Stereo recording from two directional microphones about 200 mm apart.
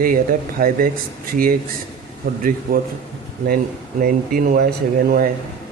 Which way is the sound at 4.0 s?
45° right (ahead or behind).